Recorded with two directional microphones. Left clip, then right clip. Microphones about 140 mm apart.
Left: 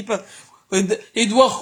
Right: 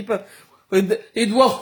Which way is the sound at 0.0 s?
35° left (ahead or behind).